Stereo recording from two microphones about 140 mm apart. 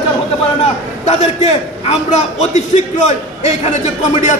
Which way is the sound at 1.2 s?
50° left (ahead or behind).